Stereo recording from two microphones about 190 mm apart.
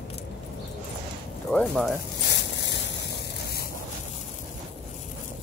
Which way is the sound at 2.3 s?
65° left (ahead or behind).